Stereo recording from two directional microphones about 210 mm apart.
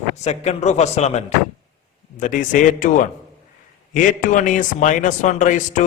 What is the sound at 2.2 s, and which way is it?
Speech, 40° left (ahead or behind).